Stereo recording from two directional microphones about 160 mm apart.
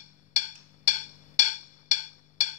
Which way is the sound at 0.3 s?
45° left (ahead or behind).